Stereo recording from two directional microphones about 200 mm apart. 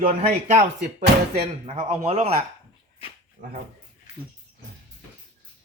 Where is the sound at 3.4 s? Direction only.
40° right (ahead or behind).